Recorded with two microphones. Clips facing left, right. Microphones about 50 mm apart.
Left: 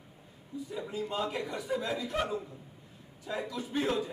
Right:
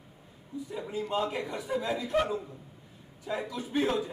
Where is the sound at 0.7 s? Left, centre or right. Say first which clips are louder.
Right 2 dB; centre.